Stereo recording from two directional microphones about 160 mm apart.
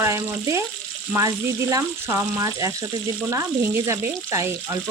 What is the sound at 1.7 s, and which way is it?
Speech, 15° right (ahead or behind).